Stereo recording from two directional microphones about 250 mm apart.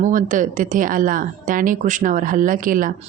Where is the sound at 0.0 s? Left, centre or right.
Right.